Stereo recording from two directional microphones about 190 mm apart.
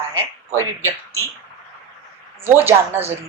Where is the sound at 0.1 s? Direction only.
15° right (ahead or behind).